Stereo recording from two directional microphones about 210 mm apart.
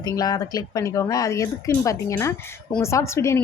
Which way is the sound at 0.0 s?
20° left (ahead or behind).